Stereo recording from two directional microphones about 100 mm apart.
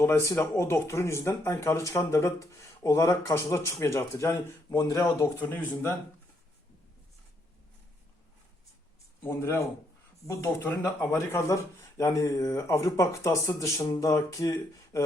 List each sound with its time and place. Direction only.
0.0 s speech: 25° left (ahead or behind)
9.2 s speech: 25° left (ahead or behind)